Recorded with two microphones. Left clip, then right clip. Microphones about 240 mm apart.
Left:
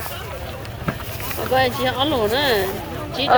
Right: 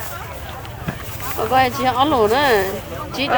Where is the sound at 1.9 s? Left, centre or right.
Right.